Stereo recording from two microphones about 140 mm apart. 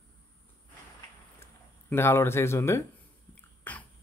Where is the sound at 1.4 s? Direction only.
15° left (ahead or behind).